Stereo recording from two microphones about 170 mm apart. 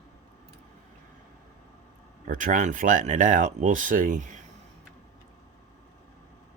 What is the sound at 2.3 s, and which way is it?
Speech, 50° right (ahead or behind).